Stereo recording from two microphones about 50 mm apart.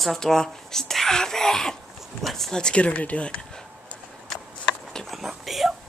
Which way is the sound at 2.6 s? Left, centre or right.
Centre.